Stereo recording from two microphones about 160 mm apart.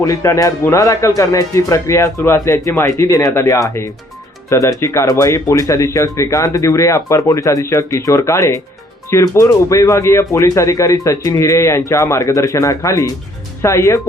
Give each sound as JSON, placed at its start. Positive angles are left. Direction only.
{"t": 0.0, "sound": "speech", "side_deg": 20}